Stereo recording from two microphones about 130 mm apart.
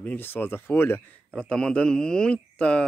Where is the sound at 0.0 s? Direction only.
15° left (ahead or behind).